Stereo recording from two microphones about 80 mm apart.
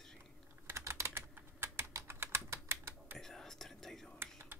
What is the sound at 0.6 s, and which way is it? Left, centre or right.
Typing, right.